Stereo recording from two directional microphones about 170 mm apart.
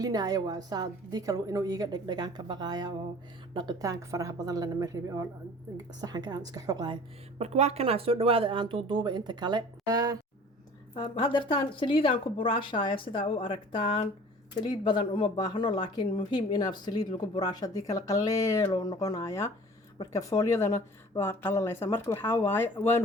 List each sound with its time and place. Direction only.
0.0 s a woman's voice: 20° right (ahead or behind)
7.3 s speech: 40° right (ahead or behind); by 10.2 s 20° right (ahead or behind)
10.9 s speech: 30° left (ahead or behind)